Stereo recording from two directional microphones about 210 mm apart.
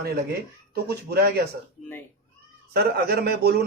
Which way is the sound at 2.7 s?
50° right (ahead or behind).